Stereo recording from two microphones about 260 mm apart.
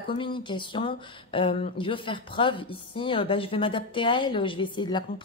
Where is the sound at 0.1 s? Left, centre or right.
Centre.